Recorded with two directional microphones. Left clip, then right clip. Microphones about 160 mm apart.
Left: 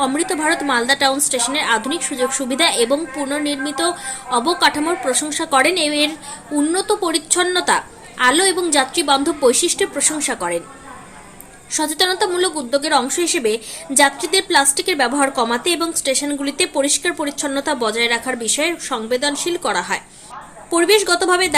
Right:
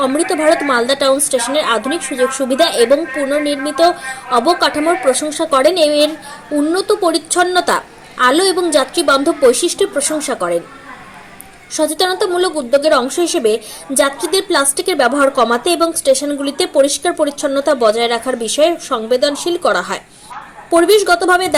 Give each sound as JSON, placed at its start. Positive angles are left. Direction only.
{"t": 0.0, "sound": "a woman's voice", "side_deg": 0}
{"t": 11.7, "sound": "a woman's voice", "side_deg": 0}